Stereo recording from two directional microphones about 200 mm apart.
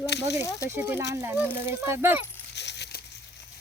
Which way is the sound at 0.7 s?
10° right (ahead or behind).